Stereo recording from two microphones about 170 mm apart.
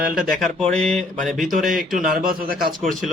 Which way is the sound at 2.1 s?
55° right (ahead or behind).